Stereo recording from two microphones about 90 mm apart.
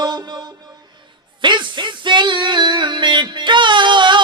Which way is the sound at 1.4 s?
60° right (ahead or behind).